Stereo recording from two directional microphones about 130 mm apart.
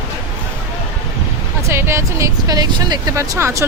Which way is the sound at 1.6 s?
20° right (ahead or behind).